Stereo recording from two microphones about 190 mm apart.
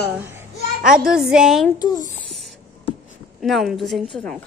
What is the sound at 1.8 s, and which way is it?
Speech, 20° left (ahead or behind).